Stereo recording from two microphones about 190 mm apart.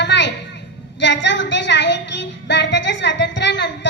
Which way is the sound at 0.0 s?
65° left (ahead or behind).